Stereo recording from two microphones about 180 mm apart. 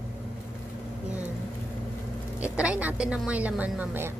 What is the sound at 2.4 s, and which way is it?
A woman's voice, 5° right (ahead or behind).